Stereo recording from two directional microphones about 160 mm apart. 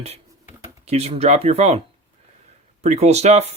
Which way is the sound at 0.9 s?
40° right (ahead or behind).